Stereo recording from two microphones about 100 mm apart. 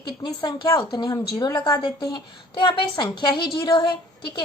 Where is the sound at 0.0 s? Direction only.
45° left (ahead or behind).